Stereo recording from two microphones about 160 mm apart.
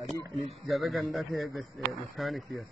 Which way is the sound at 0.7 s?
Centre (ahead or behind).